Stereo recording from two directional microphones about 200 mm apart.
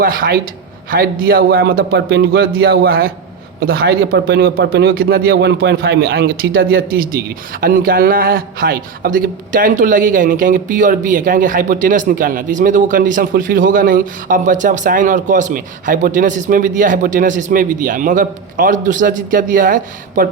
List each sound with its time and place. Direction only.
0.0 s a man's voice: 45° right (ahead or behind)